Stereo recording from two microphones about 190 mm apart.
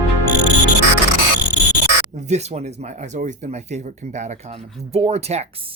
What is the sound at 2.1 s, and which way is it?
Speech, 35° right (ahead or behind).